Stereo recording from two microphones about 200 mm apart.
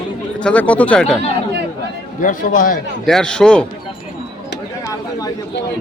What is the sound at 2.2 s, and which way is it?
Speech, 40° left (ahead or behind).